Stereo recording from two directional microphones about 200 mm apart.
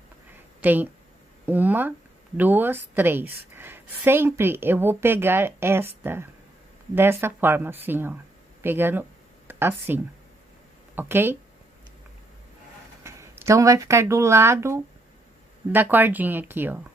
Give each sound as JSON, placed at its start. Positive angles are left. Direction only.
{"t": 0.3, "sound": "a sound", "side_deg": -10}
{"t": 1.4, "sound": "speech", "side_deg": -10}
{"t": 13.0, "sound": "speech", "side_deg": -15}